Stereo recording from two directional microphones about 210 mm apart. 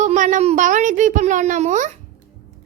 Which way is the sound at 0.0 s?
35° right (ahead or behind).